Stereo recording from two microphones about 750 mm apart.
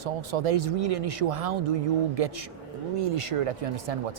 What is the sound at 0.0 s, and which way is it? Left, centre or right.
Speech, right.